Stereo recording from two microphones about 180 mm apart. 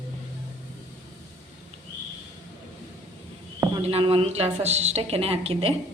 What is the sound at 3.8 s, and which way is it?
A woman's voice, 35° right (ahead or behind).